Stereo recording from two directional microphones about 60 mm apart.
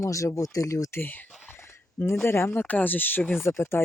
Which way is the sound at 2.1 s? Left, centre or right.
Left.